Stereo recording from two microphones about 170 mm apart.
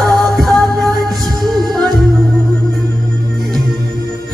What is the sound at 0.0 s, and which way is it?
Music, centre (ahead or behind).